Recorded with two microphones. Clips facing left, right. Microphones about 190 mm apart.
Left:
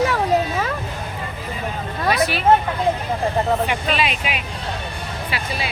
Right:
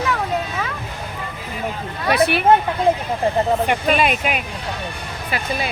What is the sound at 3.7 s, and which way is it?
Speech, 50° right (ahead or behind).